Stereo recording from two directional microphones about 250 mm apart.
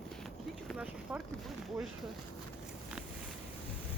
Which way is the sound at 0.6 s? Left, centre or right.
Centre.